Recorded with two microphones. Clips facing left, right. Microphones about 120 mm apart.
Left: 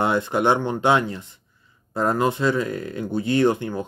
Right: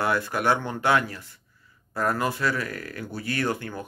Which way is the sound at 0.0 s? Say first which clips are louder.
Left 4 dB; 20° left (ahead or behind).